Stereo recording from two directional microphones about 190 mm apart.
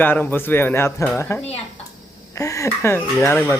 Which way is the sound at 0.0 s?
10° left (ahead or behind).